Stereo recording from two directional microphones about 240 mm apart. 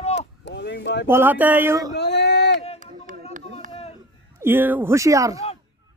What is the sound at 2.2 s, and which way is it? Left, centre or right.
Speech, left.